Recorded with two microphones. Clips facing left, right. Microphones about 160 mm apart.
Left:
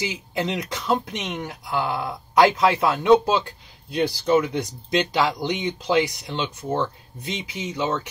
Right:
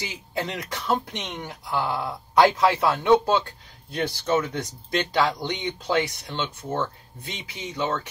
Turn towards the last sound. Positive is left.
turn(degrees=20)  # may be behind; listen again after turning